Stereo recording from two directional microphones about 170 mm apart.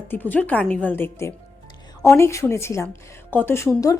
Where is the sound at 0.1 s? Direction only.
10° left (ahead or behind).